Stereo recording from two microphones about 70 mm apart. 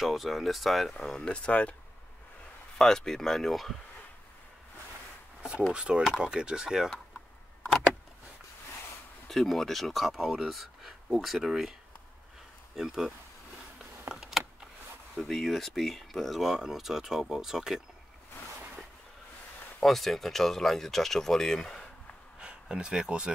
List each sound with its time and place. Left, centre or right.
0.0 s speech: centre
0.9 s speech: centre
2.8 s speech: centre
5.7 s speech: centre
9.3 s speech: centre
12.7 s speech: centre
14.0 s a sound: centre
15.1 s speech: centre
19.8 s speech: centre
22.4 s speech: centre